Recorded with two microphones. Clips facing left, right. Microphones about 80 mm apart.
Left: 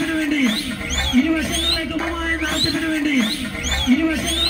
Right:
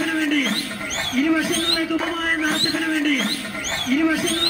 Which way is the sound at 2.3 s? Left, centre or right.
Centre.